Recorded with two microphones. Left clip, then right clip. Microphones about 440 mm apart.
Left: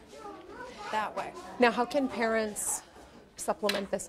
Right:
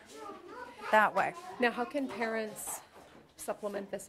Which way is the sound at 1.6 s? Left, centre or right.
Left.